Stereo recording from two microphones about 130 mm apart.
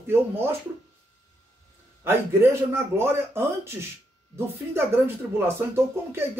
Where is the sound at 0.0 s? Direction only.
15° right (ahead or behind).